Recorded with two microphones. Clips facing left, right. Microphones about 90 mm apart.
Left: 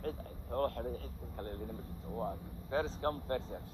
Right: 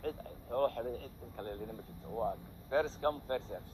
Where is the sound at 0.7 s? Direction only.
Centre (ahead or behind).